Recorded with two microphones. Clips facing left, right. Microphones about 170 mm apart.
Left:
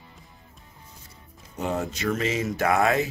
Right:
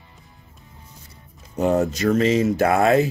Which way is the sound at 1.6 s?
45° right (ahead or behind).